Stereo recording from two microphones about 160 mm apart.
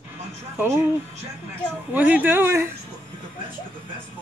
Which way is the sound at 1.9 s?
10° right (ahead or behind).